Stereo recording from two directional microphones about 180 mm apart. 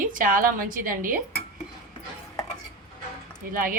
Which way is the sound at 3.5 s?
50° right (ahead or behind).